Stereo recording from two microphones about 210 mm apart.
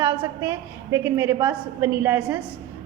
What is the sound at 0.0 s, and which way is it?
A woman's voice, 15° right (ahead or behind).